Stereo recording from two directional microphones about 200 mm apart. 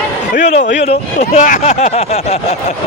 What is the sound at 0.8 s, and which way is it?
Speech, 35° left (ahead or behind).